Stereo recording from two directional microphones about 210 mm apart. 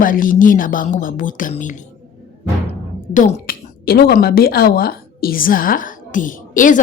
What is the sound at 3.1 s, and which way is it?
A woman's voice, 35° left (ahead or behind).